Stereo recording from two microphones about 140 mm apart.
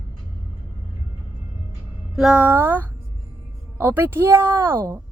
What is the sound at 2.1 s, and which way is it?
Speech, 5° right (ahead or behind).